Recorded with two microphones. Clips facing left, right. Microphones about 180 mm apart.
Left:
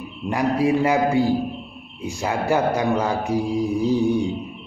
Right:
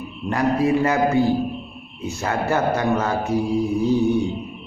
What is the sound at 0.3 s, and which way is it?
A man's voice, 10° left (ahead or behind).